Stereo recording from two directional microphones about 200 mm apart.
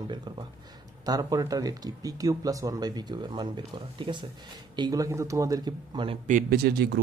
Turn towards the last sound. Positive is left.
turn(degrees=-55)  # may be behind; listen again after turning